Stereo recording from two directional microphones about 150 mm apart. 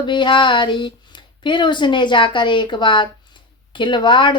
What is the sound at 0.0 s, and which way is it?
Speech, 30° left (ahead or behind).